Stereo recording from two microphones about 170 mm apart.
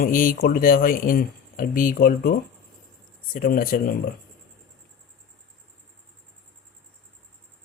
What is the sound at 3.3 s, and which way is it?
Speech, 55° left (ahead or behind).